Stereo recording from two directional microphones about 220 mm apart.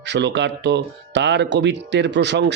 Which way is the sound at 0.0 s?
50° right (ahead or behind).